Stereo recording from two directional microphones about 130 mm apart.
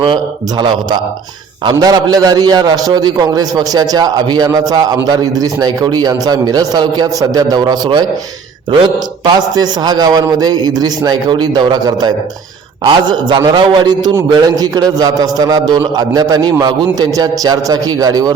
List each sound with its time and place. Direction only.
0.0 s a man's voice: 40° right (ahead or behind)